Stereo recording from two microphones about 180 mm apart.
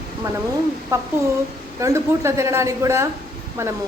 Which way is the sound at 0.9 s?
15° right (ahead or behind).